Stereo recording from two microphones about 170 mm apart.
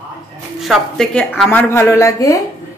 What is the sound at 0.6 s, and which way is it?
A woman's voice, centre (ahead or behind).